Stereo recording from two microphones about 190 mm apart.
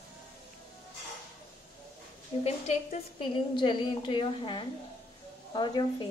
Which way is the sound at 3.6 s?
25° left (ahead or behind).